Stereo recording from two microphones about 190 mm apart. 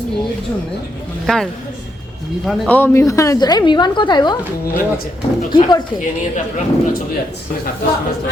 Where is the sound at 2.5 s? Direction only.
10° left (ahead or behind).